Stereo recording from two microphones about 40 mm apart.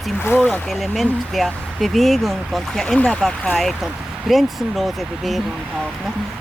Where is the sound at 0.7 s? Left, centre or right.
Centre.